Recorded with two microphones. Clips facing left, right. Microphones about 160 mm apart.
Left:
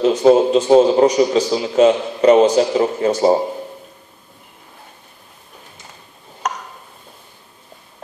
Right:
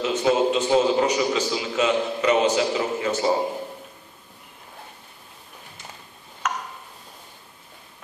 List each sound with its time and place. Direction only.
0.0 s a man's voice: 40° left (ahead or behind)